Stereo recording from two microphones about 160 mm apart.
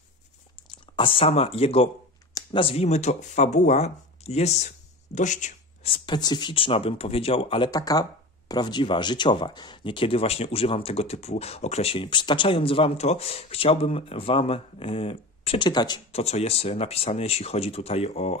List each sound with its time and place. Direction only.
0.7 s speech: 30° left (ahead or behind); by 5.5 s 50° left (ahead or behind)
5.9 s speech: 30° left (ahead or behind)
16.1 s speech: 40° left (ahead or behind)